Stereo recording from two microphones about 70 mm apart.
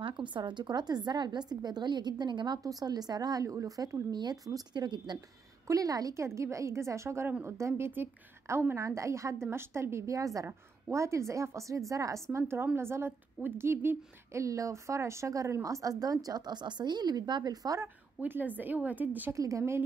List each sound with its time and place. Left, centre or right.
0.3 s a woman's voice: right
1.5 s a woman's voice: right
5.7 s a woman's voice: right
17.8 s a woman's voice: right
19.3 s a woman's voice: right